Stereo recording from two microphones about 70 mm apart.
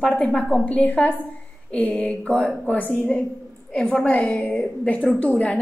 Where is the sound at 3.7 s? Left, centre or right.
Left.